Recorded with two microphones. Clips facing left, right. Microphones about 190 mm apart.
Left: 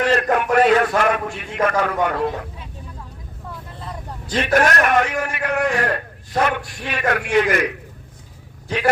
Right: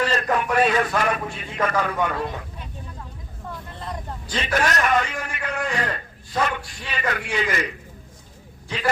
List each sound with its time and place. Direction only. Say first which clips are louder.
0.0 s a man's voice: left 4 dB; 60° left (ahead or behind)
4.3 s a man's voice: left 6 dB; 55° left (ahead or behind)